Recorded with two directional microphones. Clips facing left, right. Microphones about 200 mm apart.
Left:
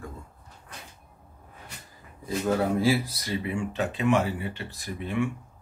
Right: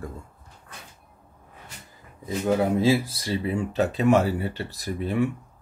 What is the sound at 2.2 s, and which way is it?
Speech, 20° right (ahead or behind).